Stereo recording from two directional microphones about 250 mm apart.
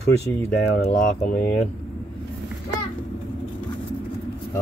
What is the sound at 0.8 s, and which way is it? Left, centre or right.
Speech, left.